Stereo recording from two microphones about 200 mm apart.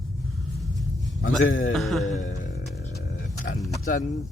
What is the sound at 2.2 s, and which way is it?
Music, 40° left (ahead or behind).